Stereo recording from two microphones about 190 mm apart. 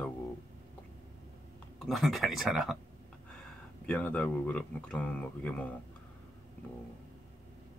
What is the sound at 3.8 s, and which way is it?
Speech, 5° left (ahead or behind).